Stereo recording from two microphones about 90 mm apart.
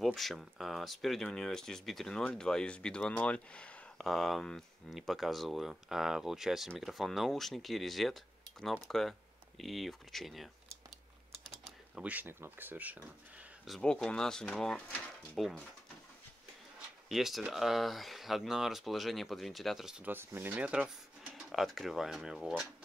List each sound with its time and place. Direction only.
0.0 s speech: centre (ahead or behind)
4.0 s speech: centre (ahead or behind)
11.9 s speech: 15° right (ahead or behind)
13.7 s speech: 10° left (ahead or behind)
17.1 s speech: centre (ahead or behind)
20.0 s speech: 25° right (ahead or behind)
21.5 s speech: centre (ahead or behind)